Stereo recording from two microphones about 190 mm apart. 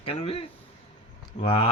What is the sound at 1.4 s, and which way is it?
Speech, 30° left (ahead or behind).